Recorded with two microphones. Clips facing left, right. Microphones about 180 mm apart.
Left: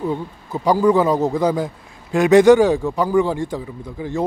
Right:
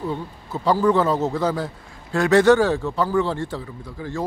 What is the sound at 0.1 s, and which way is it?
A man's voice, 15° left (ahead or behind).